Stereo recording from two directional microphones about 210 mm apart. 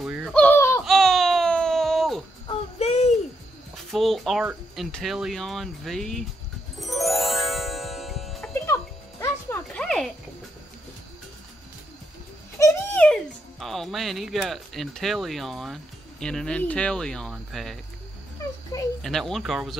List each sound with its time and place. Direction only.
0.0 s a sound: 5° right (ahead or behind)
0.8 s baby cry: centre (ahead or behind)
2.4 s child singing: 30° left (ahead or behind)
3.7 s speech: centre (ahead or behind)
6.8 s music: centre (ahead or behind)
12.5 s a child's voice: 10° left (ahead or behind)
18.4 s a sound: 15° left (ahead or behind)
19.0 s speech: centre (ahead or behind)